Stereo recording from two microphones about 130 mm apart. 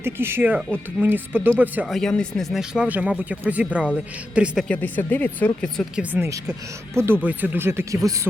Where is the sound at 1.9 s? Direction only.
5° left (ahead or behind).